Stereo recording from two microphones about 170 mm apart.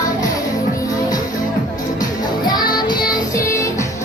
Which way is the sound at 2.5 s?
25° left (ahead or behind).